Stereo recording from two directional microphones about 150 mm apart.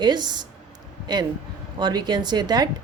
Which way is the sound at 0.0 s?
30° right (ahead or behind).